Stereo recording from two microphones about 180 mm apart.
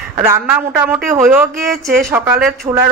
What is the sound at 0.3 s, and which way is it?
Speech, 10° right (ahead or behind).